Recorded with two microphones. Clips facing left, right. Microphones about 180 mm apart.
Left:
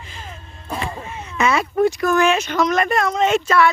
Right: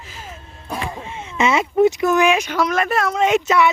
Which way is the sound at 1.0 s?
25° right (ahead or behind).